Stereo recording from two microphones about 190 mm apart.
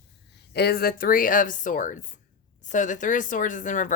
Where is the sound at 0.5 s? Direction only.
55° left (ahead or behind).